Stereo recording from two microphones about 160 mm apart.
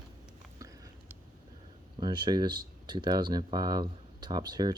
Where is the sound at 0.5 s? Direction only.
20° right (ahead or behind).